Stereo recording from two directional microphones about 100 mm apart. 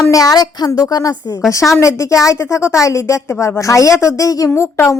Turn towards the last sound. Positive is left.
turn(degrees=30)  # may be behind; listen again after turning